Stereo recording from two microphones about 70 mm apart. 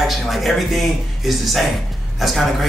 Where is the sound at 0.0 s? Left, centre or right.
Centre.